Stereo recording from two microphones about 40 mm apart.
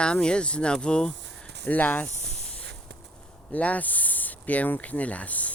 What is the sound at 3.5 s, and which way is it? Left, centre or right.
Speech, left.